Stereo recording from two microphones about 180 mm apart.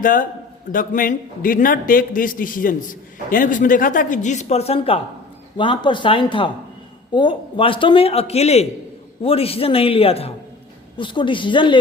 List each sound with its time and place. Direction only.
0.0 s a man's voice: 50° left (ahead or behind); by 11.8 s 25° left (ahead or behind)